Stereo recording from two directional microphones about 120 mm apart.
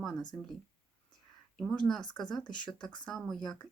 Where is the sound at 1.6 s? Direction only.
5° left (ahead or behind).